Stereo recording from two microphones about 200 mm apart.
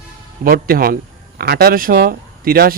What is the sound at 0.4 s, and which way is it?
Speech, 45° right (ahead or behind).